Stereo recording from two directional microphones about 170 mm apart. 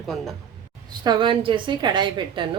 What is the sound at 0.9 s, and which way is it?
A woman's voice, 25° right (ahead or behind).